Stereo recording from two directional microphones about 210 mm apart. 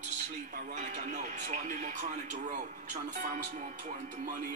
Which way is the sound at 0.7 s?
35° right (ahead or behind).